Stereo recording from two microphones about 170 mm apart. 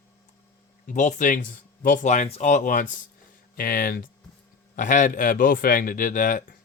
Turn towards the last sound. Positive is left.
turn(degrees=50)  # may be behind; listen again after turning